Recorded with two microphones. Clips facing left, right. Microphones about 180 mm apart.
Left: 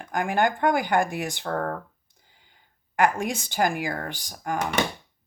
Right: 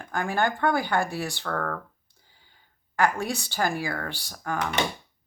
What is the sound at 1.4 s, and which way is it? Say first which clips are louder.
Speech: left 3 dB; 30° left (ahead or behind).